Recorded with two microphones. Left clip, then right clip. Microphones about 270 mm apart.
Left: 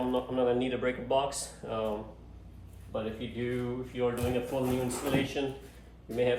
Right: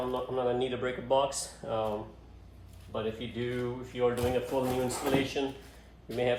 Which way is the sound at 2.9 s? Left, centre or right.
Right.